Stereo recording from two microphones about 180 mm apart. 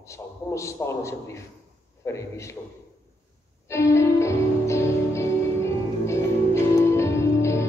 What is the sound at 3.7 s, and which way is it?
Music, 15° left (ahead or behind).